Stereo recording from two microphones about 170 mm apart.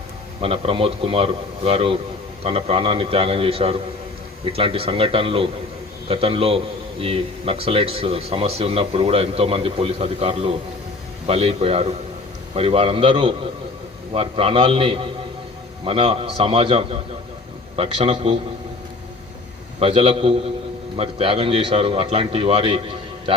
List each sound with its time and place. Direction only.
0.4 s speech: 35° right (ahead or behind)
19.8 s speech: 35° right (ahead or behind)